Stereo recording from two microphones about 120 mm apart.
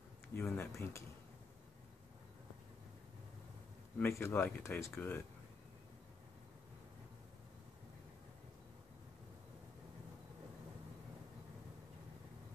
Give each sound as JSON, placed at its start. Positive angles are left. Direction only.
{"t": 0.3, "sound": "speech", "side_deg": 15}
{"t": 4.0, "sound": "speech", "side_deg": 15}